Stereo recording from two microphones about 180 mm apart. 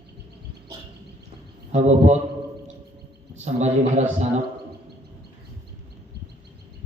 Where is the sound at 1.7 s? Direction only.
40° right (ahead or behind).